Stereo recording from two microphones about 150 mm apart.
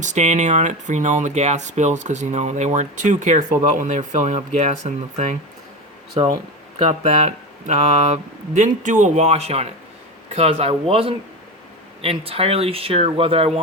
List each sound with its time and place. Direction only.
0.0 s speech: 50° right (ahead or behind)
7.2 s speech: 50° right (ahead or behind)